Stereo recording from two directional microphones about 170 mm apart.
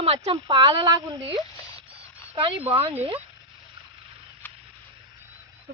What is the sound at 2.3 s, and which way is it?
Speech, 30° right (ahead or behind).